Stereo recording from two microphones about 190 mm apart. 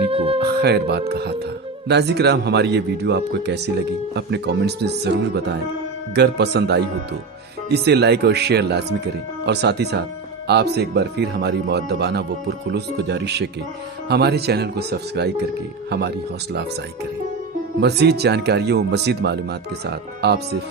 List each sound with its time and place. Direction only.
0.1 s music: 30° right (ahead or behind)
0.4 s speech: 60° right (ahead or behind)
17.7 s speech: 60° right (ahead or behind)